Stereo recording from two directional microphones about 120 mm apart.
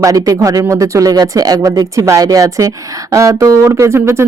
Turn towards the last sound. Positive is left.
turn(degrees=-20)  # may be behind; listen again after turning